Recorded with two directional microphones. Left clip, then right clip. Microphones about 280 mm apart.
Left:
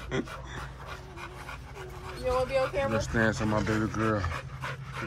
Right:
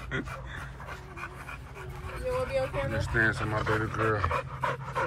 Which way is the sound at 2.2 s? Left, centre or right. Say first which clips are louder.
Left 3 dB; centre.